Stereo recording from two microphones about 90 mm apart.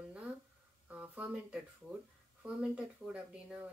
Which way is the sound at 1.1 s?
15° right (ahead or behind).